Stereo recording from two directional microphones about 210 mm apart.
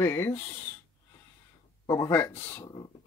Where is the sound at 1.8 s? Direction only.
15° left (ahead or behind).